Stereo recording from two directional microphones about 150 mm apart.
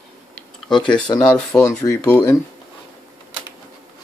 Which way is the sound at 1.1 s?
25° left (ahead or behind).